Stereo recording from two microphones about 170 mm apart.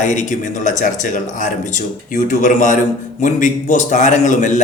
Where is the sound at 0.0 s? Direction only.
45° left (ahead or behind).